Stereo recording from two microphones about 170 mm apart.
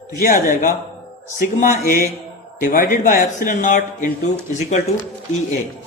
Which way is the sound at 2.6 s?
50° left (ahead or behind).